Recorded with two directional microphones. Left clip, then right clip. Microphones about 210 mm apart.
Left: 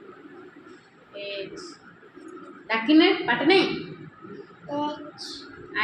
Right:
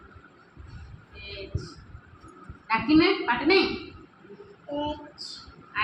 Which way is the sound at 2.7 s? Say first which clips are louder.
Left 2 dB; 25° right (ahead or behind).